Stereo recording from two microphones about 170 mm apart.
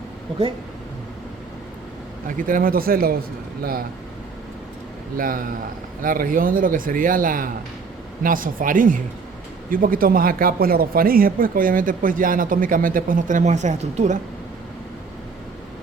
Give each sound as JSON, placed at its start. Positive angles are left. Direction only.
{"t": 2.2, "sound": "speech", "side_deg": -55}
{"t": 5.1, "sound": "a man's voice", "side_deg": -55}